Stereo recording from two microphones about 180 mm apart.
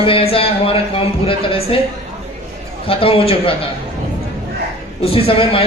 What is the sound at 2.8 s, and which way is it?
Speech, 30° left (ahead or behind).